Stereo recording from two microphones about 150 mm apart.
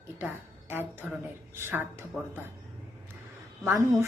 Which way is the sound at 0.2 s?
15° right (ahead or behind).